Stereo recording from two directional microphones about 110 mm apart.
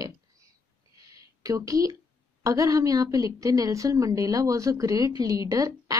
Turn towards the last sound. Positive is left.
turn(degrees=-30)  # may be behind; listen again after turning